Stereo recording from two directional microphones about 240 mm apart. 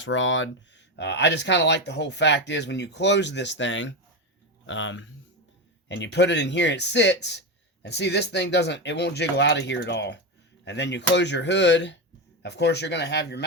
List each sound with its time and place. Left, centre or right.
0.0 s speech: left